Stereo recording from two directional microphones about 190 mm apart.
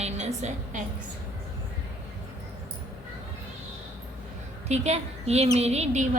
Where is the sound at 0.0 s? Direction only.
35° right (ahead or behind).